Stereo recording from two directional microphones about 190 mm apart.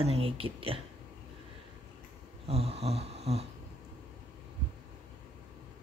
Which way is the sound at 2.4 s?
30° right (ahead or behind).